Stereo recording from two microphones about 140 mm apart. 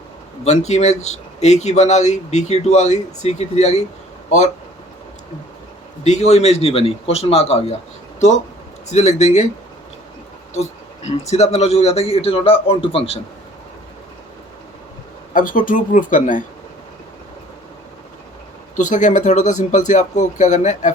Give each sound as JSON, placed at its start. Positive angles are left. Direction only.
{"t": 0.4, "sound": "speech", "side_deg": 55}
{"t": 6.1, "sound": "speech", "side_deg": 55}
{"t": 8.9, "sound": "speech", "side_deg": 55}
{"t": 10.5, "sound": "a sound", "side_deg": 55}
{"t": 11.3, "sound": "speech", "side_deg": 50}
{"t": 15.3, "sound": "speech", "side_deg": 70}
{"t": 18.8, "sound": "speech", "side_deg": 60}